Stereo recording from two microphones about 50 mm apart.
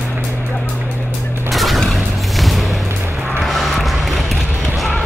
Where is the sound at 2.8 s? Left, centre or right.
Right.